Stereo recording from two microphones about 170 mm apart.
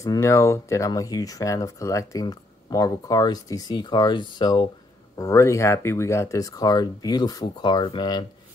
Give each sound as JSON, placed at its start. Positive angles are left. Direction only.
{"t": 0.0, "sound": "speech", "side_deg": 20}